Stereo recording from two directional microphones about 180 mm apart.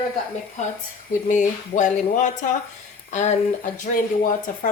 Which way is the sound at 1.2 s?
45° left (ahead or behind).